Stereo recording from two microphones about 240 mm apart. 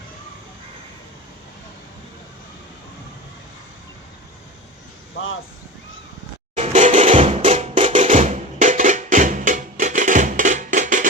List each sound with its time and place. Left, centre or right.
5.1 s speech: left
6.6 s music: right